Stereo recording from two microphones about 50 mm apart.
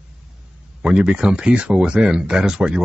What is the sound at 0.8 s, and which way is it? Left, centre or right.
Speech, centre.